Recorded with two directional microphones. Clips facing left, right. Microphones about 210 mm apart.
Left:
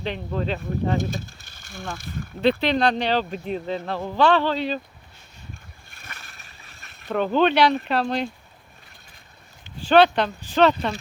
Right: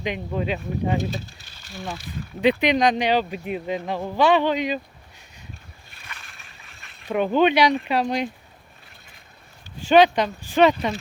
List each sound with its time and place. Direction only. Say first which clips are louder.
0.0 s speech: right 1 dB; 10° right (ahead or behind)
0.9 s speech: even; 45° left (ahead or behind)
2.4 s speech: right 1 dB; 15° right (ahead or behind)
5.9 s a sound: even; 45° left (ahead or behind)
7.1 s speech: right 1 dB; 10° right (ahead or behind)
9.9 s speech: right 1 dB; 10° right (ahead or behind)